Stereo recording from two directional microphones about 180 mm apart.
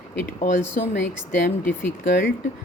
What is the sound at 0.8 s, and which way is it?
Speech, 50° left (ahead or behind).